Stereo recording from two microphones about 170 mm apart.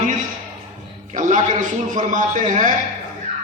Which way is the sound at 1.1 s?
45° right (ahead or behind).